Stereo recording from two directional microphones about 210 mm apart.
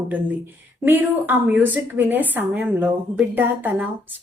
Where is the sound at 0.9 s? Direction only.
10° right (ahead or behind).